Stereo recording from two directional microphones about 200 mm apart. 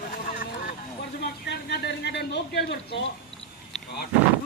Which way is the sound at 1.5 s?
55° left (ahead or behind).